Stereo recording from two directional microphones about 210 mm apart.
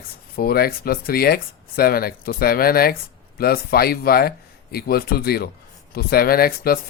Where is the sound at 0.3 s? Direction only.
45° left (ahead or behind).